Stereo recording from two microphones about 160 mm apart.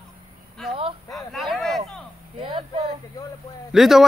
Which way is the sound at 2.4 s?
30° right (ahead or behind).